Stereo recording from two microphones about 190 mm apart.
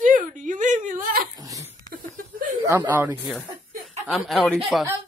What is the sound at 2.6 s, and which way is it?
Speech, 10° right (ahead or behind).